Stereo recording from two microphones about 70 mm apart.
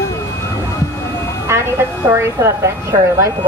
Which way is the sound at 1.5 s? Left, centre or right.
Right.